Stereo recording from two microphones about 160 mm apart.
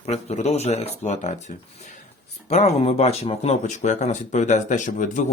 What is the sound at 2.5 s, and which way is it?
Speech, 45° left (ahead or behind).